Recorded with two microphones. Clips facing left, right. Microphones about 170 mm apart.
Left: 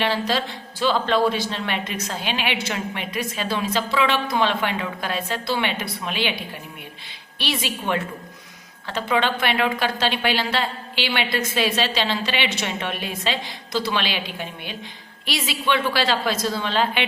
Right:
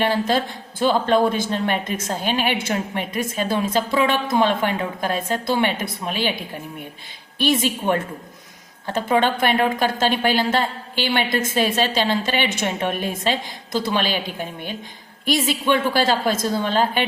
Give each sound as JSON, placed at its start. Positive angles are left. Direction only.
{"t": 0.0, "sound": "a woman's voice", "side_deg": -50}